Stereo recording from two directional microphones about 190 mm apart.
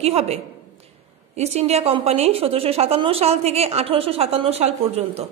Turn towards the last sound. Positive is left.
turn(degrees=-35)  # may be behind; listen again after turning